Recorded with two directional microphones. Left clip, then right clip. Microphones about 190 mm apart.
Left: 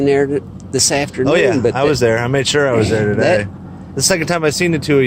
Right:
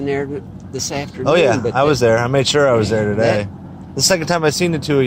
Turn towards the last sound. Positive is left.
turn(degrees=5)  # may be behind; listen again after turning